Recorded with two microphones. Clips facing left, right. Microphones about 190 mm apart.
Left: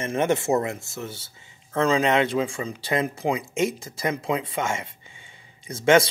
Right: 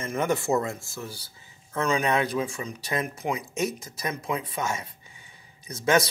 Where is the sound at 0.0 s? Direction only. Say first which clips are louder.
Left 3 dB; 25° left (ahead or behind).